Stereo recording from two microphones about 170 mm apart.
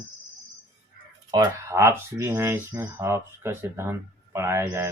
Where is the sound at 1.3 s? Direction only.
20° right (ahead or behind).